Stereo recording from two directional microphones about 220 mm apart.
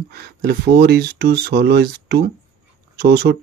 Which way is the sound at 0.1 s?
45° right (ahead or behind).